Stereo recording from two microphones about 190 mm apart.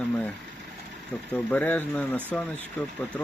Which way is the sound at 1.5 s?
10° left (ahead or behind).